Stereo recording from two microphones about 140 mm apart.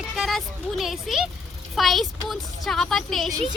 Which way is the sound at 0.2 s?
Centre (ahead or behind).